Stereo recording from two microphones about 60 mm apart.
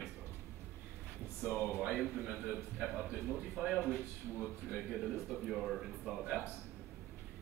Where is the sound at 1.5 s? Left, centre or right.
Left.